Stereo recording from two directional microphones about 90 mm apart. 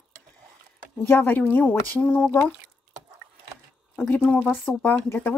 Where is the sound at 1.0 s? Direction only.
20° left (ahead or behind).